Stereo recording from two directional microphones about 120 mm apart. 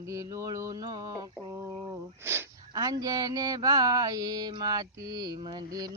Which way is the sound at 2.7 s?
30° right (ahead or behind).